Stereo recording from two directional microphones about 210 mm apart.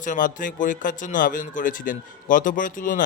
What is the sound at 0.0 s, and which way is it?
A man's voice, 40° left (ahead or behind).